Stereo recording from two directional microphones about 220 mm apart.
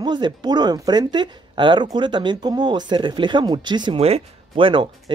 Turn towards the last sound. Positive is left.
turn(degrees=-20)  # may be behind; listen again after turning